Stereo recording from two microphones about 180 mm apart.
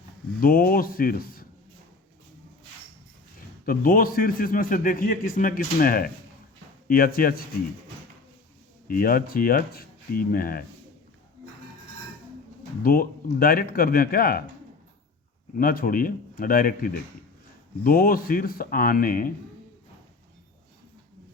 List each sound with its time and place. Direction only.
0.3 s a man's voice: 55° left (ahead or behind)
3.7 s a man's voice: 55° left (ahead or behind)
8.9 s speech: 55° left (ahead or behind)
12.8 s speech: 55° left (ahead or behind)
15.5 s a man's voice: 55° left (ahead or behind)